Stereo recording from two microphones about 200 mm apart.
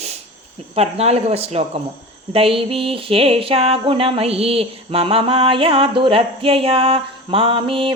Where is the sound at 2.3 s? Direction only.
25° right (ahead or behind).